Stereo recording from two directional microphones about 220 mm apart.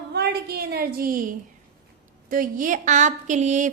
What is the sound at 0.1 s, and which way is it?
A woman's voice, 45° right (ahead or behind).